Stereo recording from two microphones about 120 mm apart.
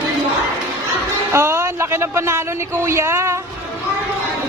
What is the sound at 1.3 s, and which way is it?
Speech, 20° right (ahead or behind).